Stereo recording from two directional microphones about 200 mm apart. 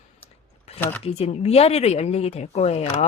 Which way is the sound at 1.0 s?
30° left (ahead or behind).